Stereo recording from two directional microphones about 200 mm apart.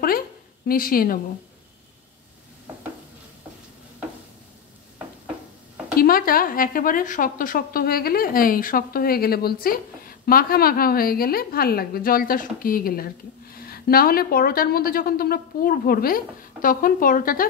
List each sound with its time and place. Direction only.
0.7 s a woman's voice: 45° left (ahead or behind)
5.9 s a woman's voice: 45° left (ahead or behind)